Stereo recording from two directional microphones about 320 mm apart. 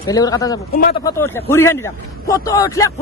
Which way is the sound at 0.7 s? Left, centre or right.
Left.